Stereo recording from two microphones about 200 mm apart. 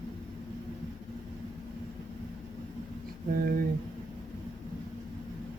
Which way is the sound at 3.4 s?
45° right (ahead or behind).